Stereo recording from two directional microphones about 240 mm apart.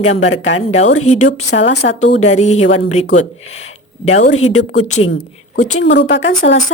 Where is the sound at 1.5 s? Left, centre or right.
Left.